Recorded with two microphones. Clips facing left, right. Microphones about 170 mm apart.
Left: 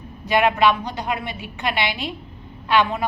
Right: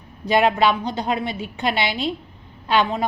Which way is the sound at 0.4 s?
30° right (ahead or behind).